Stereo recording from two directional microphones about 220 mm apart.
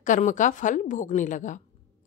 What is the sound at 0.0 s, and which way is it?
A woman's voice, 35° left (ahead or behind).